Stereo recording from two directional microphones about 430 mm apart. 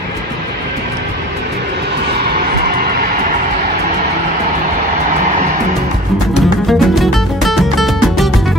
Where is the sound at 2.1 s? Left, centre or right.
Right.